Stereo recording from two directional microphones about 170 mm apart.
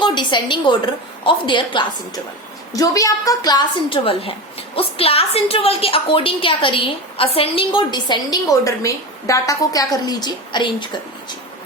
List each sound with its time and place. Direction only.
0.0 s a woman's voice: 25° left (ahead or behind)